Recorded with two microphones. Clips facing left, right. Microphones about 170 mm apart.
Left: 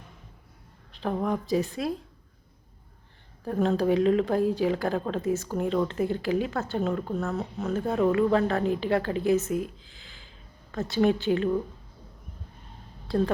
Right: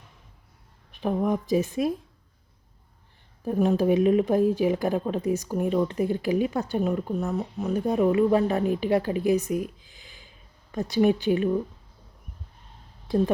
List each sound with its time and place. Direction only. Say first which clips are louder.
0.9 s speech: right 3 dB; 15° right (ahead or behind)
3.4 s speech: right 2 dB; 15° right (ahead or behind)
13.1 s speech: right 2 dB; 20° right (ahead or behind)